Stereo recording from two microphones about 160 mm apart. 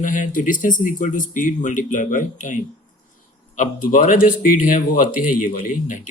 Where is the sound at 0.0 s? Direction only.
55° left (ahead or behind).